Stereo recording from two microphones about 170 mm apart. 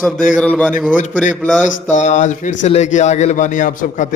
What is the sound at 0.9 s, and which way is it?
Speech, 50° left (ahead or behind).